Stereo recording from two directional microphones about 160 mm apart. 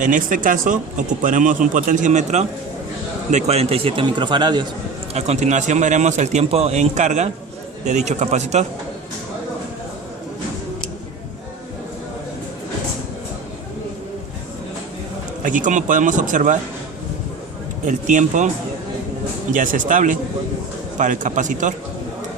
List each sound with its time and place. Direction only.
0.0 s a man's voice: 55° right (ahead or behind); by 4.6 s 30° right (ahead or behind)
5.1 s speech: 45° right (ahead or behind)
15.4 s speech: 55° right (ahead or behind)
17.8 s speech: 50° right (ahead or behind)